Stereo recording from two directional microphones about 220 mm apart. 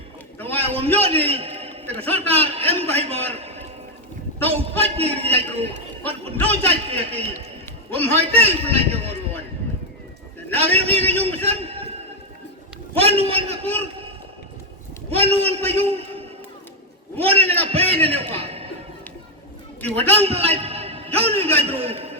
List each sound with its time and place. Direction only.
0.5 s a sound: 25° right (ahead or behind)
2.0 s a man's voice: 25° right (ahead or behind)
6.7 s a man's voice: 25° right (ahead or behind)
10.5 s a man's voice: 25° right (ahead or behind)
12.9 s a man's voice: 25° right (ahead or behind)
15.1 s a man's voice: 25° right (ahead or behind)
18.3 s a sound: 25° right (ahead or behind)
19.8 s a man's voice: 25° right (ahead or behind)